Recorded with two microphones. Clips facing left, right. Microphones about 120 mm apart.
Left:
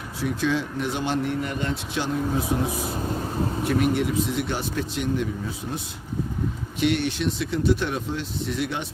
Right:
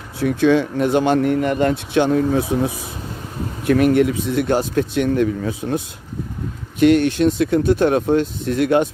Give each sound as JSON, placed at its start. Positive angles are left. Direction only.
{"t": 0.2, "sound": "speech", "side_deg": -60}
{"t": 3.7, "sound": "speech", "side_deg": -60}
{"t": 6.7, "sound": "speech", "side_deg": -50}